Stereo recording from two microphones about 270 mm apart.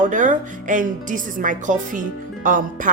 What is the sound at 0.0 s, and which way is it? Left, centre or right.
A woman's voice, right.